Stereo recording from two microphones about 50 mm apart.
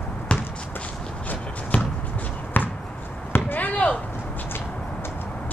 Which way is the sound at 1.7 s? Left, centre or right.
Left.